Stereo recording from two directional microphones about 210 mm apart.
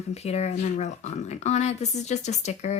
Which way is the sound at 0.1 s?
30° left (ahead or behind).